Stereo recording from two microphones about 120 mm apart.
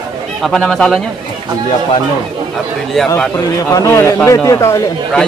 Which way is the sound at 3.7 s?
25° left (ahead or behind).